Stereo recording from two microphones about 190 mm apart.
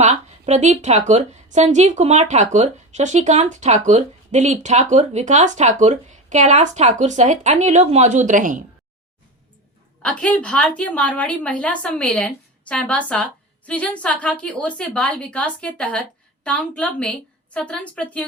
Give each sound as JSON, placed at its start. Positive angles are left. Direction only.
{"t": 0.0, "sound": "a woman's voice", "side_deg": -35}
{"t": 10.0, "sound": "a woman's voice", "side_deg": 5}